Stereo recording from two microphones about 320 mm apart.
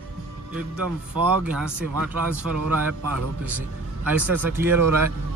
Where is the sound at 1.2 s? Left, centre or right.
Right.